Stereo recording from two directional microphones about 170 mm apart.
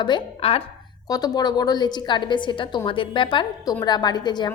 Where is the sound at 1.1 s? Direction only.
25° left (ahead or behind).